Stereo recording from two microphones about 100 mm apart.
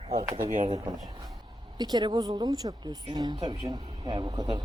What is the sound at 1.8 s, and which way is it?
Speech, 45° right (ahead or behind).